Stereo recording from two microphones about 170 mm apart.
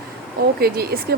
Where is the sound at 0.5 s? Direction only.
65° right (ahead or behind).